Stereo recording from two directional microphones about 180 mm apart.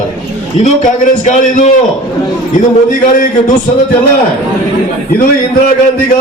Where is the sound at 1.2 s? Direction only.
45° left (ahead or behind).